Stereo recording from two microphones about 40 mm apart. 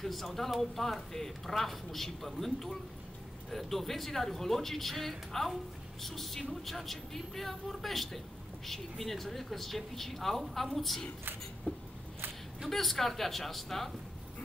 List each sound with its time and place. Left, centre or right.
0.0 s speech: centre
11.7 s a sound: left
12.6 s speech: centre